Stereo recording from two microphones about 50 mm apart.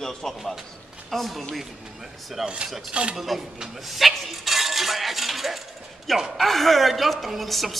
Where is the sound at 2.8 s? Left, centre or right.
Right.